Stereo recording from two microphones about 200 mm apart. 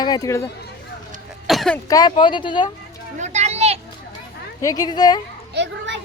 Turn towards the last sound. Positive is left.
turn(degrees=-60)  # may be behind; listen again after turning